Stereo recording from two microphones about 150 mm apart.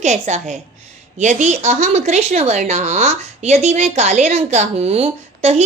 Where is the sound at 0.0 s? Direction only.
50° right (ahead or behind).